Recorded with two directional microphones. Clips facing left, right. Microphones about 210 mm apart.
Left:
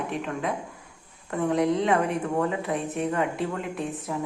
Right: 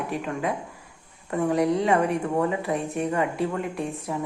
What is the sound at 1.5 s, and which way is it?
Speech, centre (ahead or behind).